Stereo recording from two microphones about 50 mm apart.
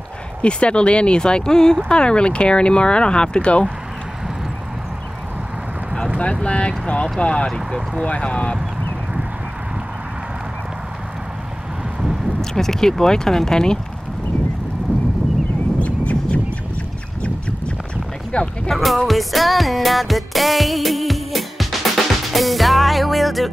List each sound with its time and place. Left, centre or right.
0.4 s speech: left
6.4 s speech: left
7.5 s speech: centre
8.0 s speech: left
12.0 s vehicle: centre
12.4 s speech: centre
15.8 s a sound: left
18.3 s speech: left
18.7 s speech: centre
19.0 s music: centre